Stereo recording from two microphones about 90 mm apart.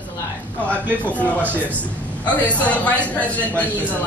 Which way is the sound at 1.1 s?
15° left (ahead or behind).